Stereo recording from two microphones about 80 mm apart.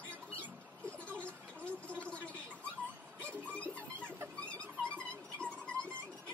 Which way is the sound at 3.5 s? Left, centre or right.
Centre.